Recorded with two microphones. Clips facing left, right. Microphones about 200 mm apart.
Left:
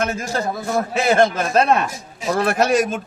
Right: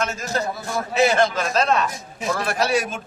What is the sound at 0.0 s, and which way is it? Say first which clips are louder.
A man's voice: left 3 dB; 55° left (ahead or behind).